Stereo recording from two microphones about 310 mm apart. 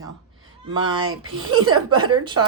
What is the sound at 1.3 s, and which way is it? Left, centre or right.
Speech, right.